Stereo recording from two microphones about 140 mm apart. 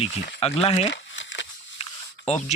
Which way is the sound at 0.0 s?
45° left (ahead or behind).